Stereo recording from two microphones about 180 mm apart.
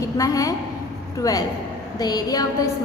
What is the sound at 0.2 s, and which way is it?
A woman's voice, 20° left (ahead or behind).